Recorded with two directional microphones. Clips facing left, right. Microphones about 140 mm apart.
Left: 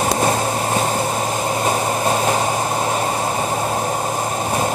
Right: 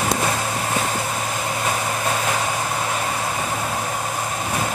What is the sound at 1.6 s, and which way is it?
Vehicle, 35° left (ahead or behind).